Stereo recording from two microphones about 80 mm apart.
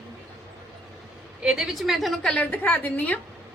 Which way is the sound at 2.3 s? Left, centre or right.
Centre.